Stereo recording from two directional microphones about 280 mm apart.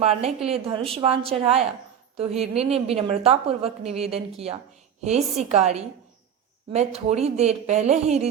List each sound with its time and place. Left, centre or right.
0.0 s a woman's voice: right